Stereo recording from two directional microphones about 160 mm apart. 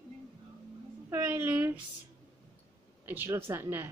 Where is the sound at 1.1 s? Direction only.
10° right (ahead or behind).